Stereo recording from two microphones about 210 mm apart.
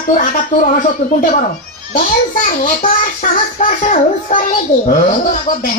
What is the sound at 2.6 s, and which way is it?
Speech, 40° left (ahead or behind).